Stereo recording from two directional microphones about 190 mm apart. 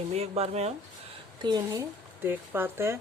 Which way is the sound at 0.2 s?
35° right (ahead or behind).